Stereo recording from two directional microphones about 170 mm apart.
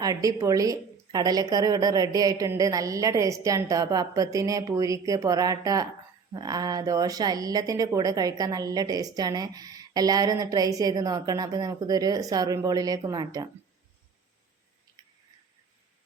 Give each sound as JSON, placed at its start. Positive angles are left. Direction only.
{"t": 0.0, "sound": "a woman's voice", "side_deg": -20}